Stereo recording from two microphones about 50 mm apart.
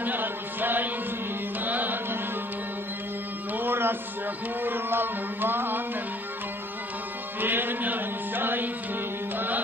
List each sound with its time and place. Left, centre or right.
0.0 s music: right
3.5 s music: right
7.3 s music: right